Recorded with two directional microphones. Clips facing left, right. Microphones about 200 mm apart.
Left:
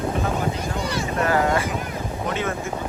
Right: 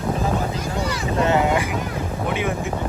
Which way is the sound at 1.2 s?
20° right (ahead or behind).